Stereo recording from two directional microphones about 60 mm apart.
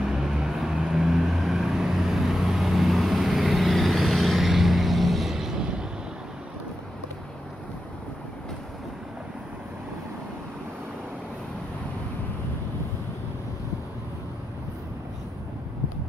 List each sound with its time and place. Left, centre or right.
0.0 s vehicle: centre